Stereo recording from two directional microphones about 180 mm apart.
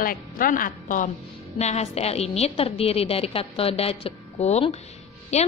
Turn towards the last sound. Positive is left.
turn(degrees=35)  # may be behind; listen again after turning